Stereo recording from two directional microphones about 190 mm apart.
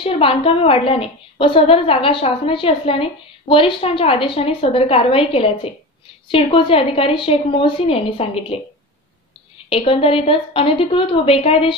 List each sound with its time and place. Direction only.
0.0 s a woman's voice: 30° left (ahead or behind)
9.7 s a woman's voice: 30° left (ahead or behind)